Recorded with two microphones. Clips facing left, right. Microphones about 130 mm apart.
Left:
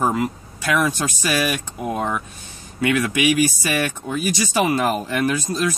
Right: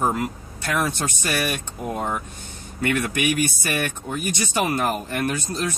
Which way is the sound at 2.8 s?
90° left.